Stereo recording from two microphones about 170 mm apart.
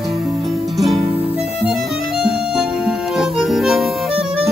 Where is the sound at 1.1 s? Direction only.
35° right (ahead or behind).